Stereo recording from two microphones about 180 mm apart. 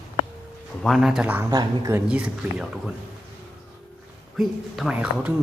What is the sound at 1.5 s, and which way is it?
Speech, 20° right (ahead or behind).